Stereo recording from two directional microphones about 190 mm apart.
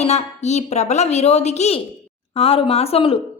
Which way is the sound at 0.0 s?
35° left (ahead or behind).